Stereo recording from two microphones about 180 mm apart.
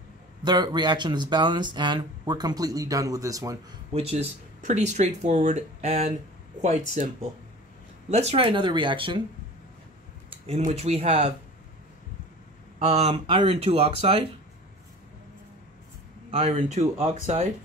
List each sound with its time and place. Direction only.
0.4 s speech: 25° right (ahead or behind)
3.9 s speech: 35° right (ahead or behind)
8.1 s speech: 35° right (ahead or behind)
10.3 s speech: 40° right (ahead or behind)
12.7 s speech: 35° right (ahead or behind)
16.3 s speech: 35° right (ahead or behind)